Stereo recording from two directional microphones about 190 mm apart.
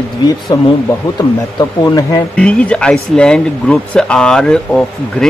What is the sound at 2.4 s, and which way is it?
Speech, 5° left (ahead or behind).